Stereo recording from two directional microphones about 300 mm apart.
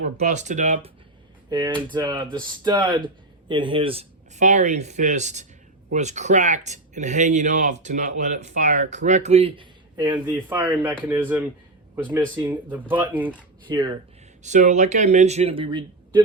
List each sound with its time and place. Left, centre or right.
0.2 s speech: right